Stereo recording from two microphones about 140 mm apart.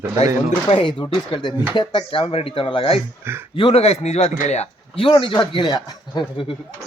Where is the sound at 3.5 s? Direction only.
45° left (ahead or behind).